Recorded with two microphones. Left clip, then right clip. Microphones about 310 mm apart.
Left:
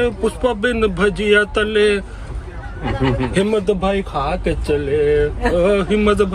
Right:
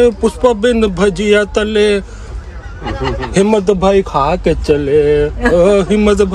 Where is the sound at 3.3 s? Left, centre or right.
Centre.